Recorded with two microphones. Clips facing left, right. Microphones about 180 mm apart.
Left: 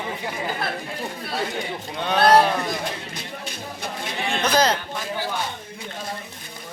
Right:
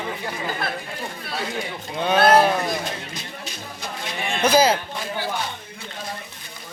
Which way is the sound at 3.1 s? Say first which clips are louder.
Left 1 dB; 55° left (ahead or behind).